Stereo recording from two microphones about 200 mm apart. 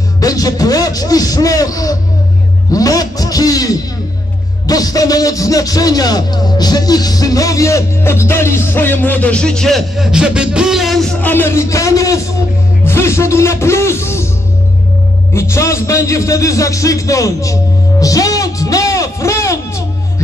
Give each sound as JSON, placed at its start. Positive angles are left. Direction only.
{"t": 0.2, "sound": "a man's voice", "side_deg": 20}
{"t": 15.3, "sound": "a man's voice", "side_deg": 15}
{"t": 18.0, "sound": "music", "side_deg": 15}